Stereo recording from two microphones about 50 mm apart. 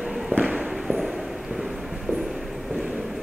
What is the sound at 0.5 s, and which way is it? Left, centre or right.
Walk, centre.